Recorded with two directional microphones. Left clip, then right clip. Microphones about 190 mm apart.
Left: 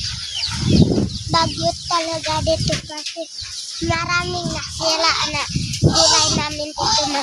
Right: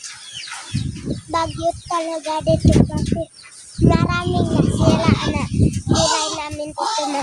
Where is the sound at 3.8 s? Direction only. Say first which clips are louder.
Even; 15° right (ahead or behind).